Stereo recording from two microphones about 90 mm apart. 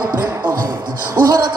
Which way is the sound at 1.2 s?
45° right (ahead or behind).